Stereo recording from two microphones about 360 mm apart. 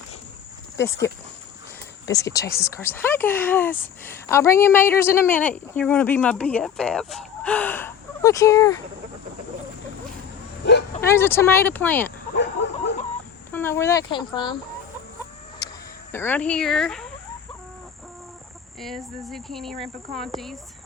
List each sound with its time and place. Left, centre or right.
2.1 s speech: centre
10.7 s bow-wow: left
11.1 s speech: centre
12.4 s a sound: left
13.5 s speech: centre
15.6 s a sound: centre
16.1 s speech: centre
18.8 s speech: centre